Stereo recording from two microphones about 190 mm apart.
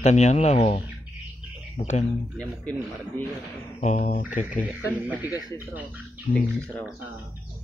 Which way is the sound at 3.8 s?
40° left (ahead or behind).